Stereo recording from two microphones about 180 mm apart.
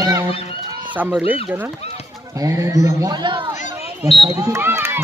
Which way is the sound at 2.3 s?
20° right (ahead or behind).